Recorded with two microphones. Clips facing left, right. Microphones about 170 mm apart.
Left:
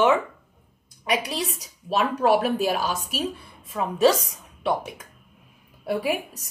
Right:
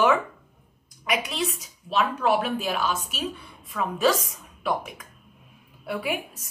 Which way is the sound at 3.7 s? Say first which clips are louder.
Left 3 dB; 25° left (ahead or behind).